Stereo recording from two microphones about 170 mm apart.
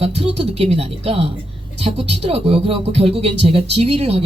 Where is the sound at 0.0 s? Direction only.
35° right (ahead or behind).